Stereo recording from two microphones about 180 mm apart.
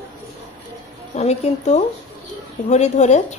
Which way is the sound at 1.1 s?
35° left (ahead or behind).